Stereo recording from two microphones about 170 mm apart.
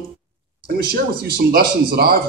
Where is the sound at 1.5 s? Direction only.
60° right (ahead or behind).